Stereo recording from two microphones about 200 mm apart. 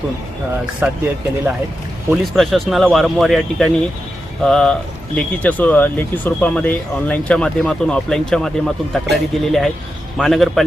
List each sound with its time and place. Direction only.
0.8 s speech: 10° right (ahead or behind)
2.0 s speech: centre (ahead or behind)